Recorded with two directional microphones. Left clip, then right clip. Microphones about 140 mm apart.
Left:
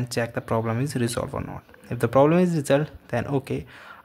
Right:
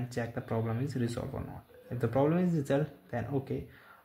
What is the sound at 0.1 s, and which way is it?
Speech, 30° left (ahead or behind).